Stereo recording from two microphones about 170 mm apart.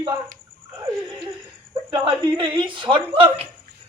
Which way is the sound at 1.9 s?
30° right (ahead or behind).